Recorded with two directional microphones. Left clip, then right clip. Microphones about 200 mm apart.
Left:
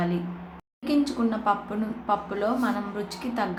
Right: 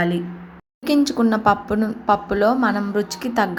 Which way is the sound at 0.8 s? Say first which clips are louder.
Right 7 dB; 35° right (ahead or behind).